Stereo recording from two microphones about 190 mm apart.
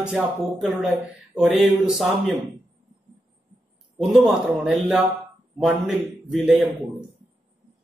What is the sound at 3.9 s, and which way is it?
Speech, 5° right (ahead or behind).